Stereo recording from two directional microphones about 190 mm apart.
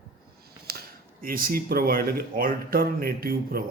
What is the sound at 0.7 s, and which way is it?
Speech, 50° right (ahead or behind).